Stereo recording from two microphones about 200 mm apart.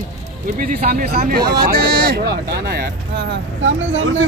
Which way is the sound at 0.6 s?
40° right (ahead or behind).